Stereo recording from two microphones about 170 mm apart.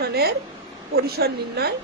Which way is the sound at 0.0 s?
70° right (ahead or behind).